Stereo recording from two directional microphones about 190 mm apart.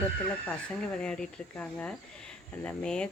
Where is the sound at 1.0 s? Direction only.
5° left (ahead or behind).